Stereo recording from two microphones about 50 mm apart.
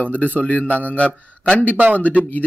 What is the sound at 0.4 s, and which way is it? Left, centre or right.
A man's voice, left.